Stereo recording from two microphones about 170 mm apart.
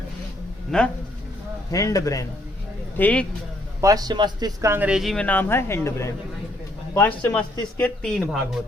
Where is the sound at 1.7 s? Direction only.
20° left (ahead or behind).